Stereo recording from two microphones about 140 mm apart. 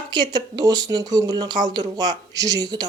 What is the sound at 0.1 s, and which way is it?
Speech, 30° right (ahead or behind).